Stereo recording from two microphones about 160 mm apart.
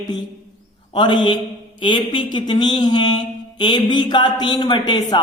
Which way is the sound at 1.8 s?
30° left (ahead or behind).